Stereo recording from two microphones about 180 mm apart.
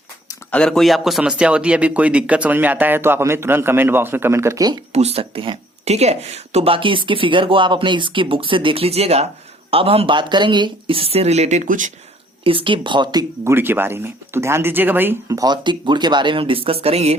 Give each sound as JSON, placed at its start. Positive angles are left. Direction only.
{"t": 0.5, "sound": "a man's voice", "side_deg": 5}
{"t": 4.9, "sound": "speech", "side_deg": -35}
{"t": 12.5, "sound": "speech", "side_deg": -30}